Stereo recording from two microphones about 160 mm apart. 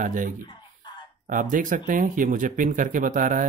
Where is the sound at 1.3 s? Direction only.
55° right (ahead or behind).